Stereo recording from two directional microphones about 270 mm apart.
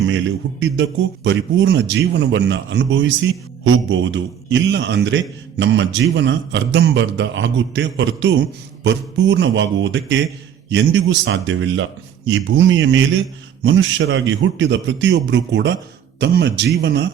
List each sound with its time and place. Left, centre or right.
0.1 s a man's voice: right